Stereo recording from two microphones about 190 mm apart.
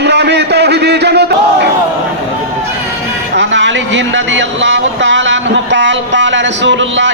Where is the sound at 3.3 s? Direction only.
70° right (ahead or behind).